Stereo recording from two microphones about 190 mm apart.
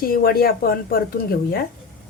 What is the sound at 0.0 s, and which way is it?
Speech, 50° left (ahead or behind).